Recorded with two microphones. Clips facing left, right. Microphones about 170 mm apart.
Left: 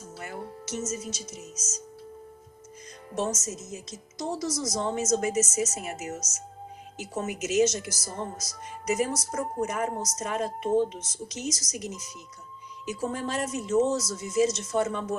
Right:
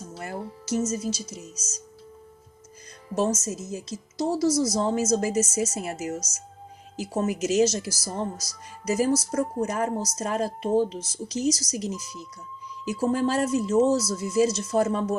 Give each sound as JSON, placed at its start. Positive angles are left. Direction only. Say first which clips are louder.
{"t": 0.2, "sound": "a woman's voice", "louder": "right 3 dB", "side_deg": -35}
{"t": 3.2, "sound": "a woman's voice", "louder": "right 5 dB", "side_deg": -30}